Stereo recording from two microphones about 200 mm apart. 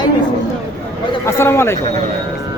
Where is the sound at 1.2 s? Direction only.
10° left (ahead or behind).